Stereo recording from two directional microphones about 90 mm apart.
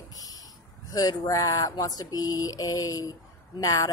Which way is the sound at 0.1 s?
45° left (ahead or behind).